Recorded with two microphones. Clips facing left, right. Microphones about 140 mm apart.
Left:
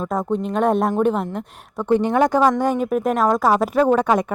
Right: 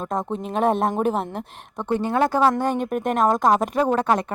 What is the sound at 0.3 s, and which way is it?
Speech, centre (ahead or behind).